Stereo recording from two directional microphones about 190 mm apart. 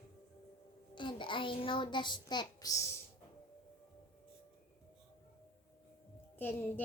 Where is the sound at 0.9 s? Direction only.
25° left (ahead or behind).